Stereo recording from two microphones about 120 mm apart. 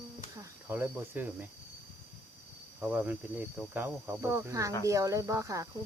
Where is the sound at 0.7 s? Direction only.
15° right (ahead or behind).